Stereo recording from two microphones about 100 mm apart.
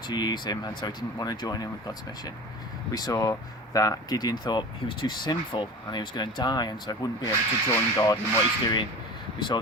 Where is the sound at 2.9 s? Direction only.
40° left (ahead or behind).